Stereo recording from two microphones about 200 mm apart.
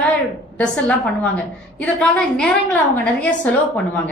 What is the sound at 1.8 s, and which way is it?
A woman's voice, 5° left (ahead or behind).